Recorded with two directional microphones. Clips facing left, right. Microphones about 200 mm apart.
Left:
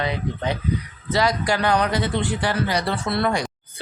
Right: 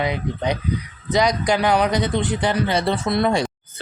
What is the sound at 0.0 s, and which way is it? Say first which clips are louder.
Speech: right 2 dB; 15° right (ahead or behind).